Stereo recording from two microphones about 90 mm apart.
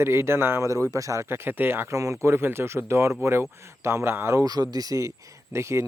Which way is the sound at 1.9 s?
35° right (ahead or behind).